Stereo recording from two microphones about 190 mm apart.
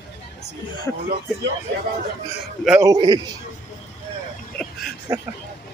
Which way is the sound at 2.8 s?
20° right (ahead or behind).